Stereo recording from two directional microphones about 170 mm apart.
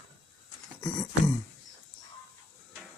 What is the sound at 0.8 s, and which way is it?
Beatboxing, 25° left (ahead or behind).